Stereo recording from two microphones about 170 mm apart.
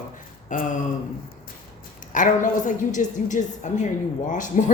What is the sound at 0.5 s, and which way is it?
Speech, 50° left (ahead or behind).